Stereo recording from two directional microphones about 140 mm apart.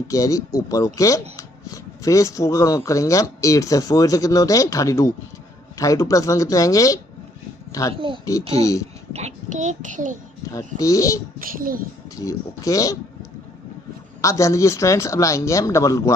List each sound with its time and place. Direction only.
0.1 s speech: 25° left (ahead or behind)
7.9 s speech: 40° right (ahead or behind)
8.3 s speech: 25° left (ahead or behind)
9.1 s child singing: 55° right (ahead or behind)
10.5 s speech: 25° left (ahead or behind)
11.4 s a child's voice: 90° right
12.2 s speech: 25° left (ahead or behind)
14.2 s speech: 20° left (ahead or behind)